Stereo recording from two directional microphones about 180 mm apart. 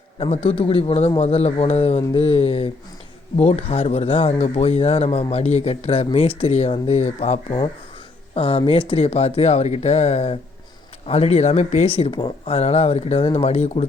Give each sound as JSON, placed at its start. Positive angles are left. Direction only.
{"t": 0.2, "sound": "speech", "side_deg": 35}